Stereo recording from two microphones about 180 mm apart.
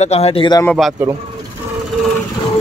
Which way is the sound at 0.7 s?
Centre (ahead or behind).